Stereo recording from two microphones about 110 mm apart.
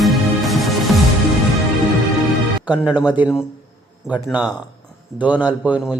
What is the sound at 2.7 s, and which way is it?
A man's voice, 15° right (ahead or behind).